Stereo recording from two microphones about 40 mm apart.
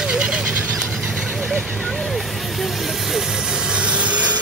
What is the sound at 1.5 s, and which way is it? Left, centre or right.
Speech, centre.